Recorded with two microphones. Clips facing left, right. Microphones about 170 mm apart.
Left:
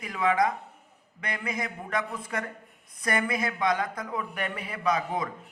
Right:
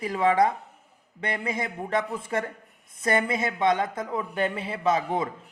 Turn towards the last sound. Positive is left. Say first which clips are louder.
# right 3 dB
turn(degrees=-25)  # may be behind; listen again after turning